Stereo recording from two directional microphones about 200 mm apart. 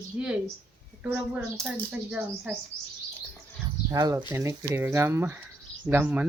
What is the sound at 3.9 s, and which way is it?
A woman's voice, 20° right (ahead or behind).